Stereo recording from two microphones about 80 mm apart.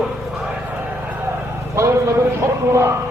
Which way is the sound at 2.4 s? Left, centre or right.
Right.